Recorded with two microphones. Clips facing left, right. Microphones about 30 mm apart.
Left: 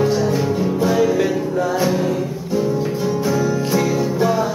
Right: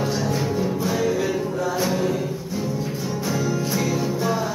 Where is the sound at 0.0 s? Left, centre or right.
Centre.